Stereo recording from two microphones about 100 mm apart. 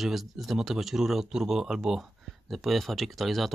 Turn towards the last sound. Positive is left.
turn(degrees=0)  # may be behind; listen again after turning